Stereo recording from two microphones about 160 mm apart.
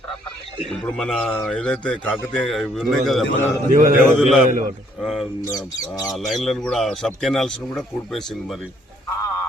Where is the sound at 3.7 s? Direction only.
60° right (ahead or behind).